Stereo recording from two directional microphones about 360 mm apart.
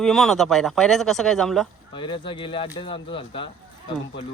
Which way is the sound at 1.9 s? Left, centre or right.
Centre.